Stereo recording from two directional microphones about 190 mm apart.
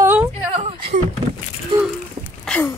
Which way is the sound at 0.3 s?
30° right (ahead or behind).